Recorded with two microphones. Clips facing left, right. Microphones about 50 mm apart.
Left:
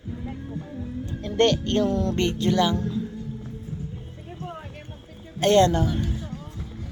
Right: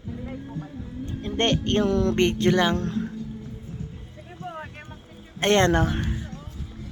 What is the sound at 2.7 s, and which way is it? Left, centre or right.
Speech, right.